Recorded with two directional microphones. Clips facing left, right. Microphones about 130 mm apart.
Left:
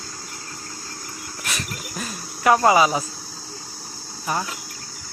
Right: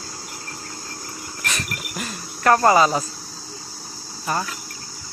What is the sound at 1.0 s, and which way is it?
Dog, 25° right (ahead or behind).